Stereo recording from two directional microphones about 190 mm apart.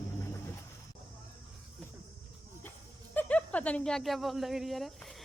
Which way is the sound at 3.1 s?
5° left (ahead or behind).